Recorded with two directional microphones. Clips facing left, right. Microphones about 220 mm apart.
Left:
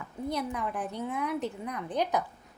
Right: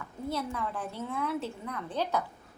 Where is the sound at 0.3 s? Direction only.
15° left (ahead or behind).